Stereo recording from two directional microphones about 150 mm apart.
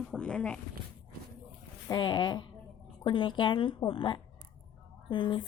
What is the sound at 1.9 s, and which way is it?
A woman's voice, 30° left (ahead or behind).